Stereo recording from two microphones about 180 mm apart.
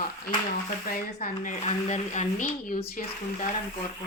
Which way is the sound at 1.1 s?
45° left (ahead or behind).